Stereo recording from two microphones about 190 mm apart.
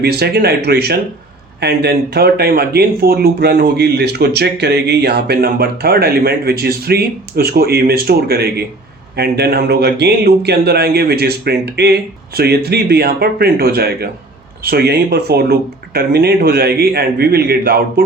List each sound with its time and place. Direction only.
0.0 s speech: 55° right (ahead or behind)